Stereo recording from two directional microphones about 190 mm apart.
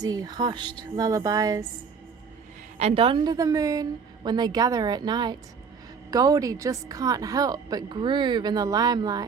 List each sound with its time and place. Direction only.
0.0 s a woman's voice: 20° right (ahead or behind)
2.7 s a woman's voice: 30° right (ahead or behind)